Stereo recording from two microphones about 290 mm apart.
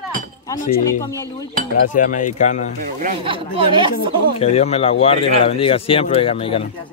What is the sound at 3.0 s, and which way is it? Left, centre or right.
Speech, centre.